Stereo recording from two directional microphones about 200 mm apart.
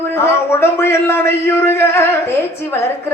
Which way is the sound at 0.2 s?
10° left (ahead or behind).